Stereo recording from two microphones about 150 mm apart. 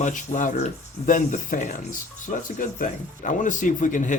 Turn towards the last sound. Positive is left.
turn(degrees=60)  # may be behind; listen again after turning